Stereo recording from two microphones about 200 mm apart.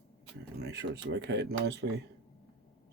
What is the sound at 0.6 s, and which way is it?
Speech, 55° right (ahead or behind).